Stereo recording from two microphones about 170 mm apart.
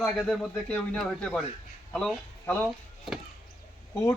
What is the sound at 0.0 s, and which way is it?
Speech, 5° left (ahead or behind).